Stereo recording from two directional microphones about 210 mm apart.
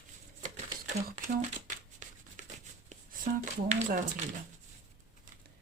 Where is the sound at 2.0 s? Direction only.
35° right (ahead or behind).